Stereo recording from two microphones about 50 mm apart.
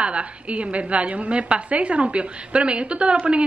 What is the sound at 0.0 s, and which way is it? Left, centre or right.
A woman's voice, right.